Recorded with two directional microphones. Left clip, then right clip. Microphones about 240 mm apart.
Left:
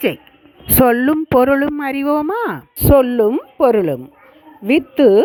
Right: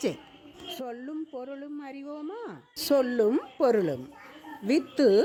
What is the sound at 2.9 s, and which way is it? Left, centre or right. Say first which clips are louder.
Speech: left 12 dB; left.